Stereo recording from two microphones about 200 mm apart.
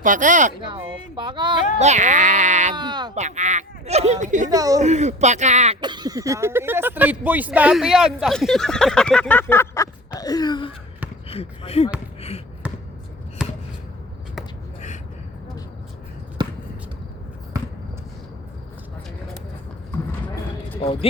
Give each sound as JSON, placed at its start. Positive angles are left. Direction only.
{"t": 0.0, "sound": "speech", "side_deg": -40}
{"t": 1.1, "sound": "speech", "side_deg": -25}
{"t": 1.8, "sound": "speech", "side_deg": -35}
{"t": 2.7, "sound": "speech", "side_deg": -20}
{"t": 3.2, "sound": "speech", "side_deg": -35}
{"t": 4.4, "sound": "speech", "side_deg": -15}
{"t": 4.8, "sound": "speech", "side_deg": -35}
{"t": 5.8, "sound": "speech", "side_deg": -20}
{"t": 10.2, "sound": "a sound", "side_deg": 20}
{"t": 11.3, "sound": "speech", "side_deg": 30}
{"t": 12.6, "sound": "basketball bounce", "side_deg": -5}
{"t": 16.4, "sound": "basketball bounce", "side_deg": -20}
{"t": 17.5, "sound": "basketball bounce", "side_deg": -15}
{"t": 20.8, "sound": "a sound", "side_deg": 30}